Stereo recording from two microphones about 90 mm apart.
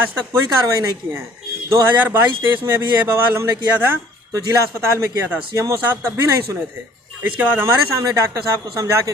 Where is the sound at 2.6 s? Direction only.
25° right (ahead or behind).